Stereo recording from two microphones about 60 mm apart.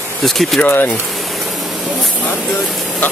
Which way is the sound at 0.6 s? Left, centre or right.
Left.